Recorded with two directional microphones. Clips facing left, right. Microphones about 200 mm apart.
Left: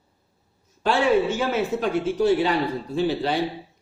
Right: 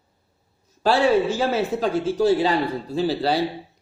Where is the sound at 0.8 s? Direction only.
35° right (ahead or behind).